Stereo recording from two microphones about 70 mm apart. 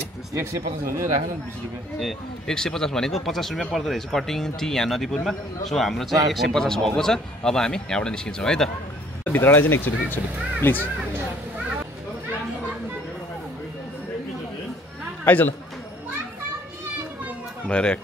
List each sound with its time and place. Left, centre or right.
0.3 s speech: right
2.0 s speech: centre
9.2 s speech: left
15.2 s speech: left
17.6 s speech: centre